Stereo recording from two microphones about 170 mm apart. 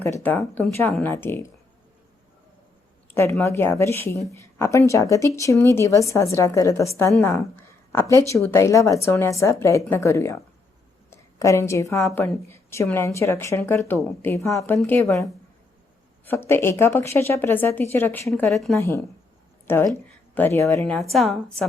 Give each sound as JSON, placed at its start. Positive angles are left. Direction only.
{"t": 0.0, "sound": "speech", "side_deg": 15}
{"t": 3.1, "sound": "speech", "side_deg": 15}
{"t": 7.5, "sound": "a sound", "side_deg": 15}
{"t": 8.3, "sound": "a woman's voice", "side_deg": 15}
{"t": 16.2, "sound": "speech", "side_deg": 15}
{"t": 18.5, "sound": "a woman's voice", "side_deg": 0}
{"t": 19.6, "sound": "a woman's voice", "side_deg": 15}
{"t": 20.8, "sound": "a woman's voice", "side_deg": 0}